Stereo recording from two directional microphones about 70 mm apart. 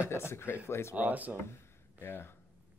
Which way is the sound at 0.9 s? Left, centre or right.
Right.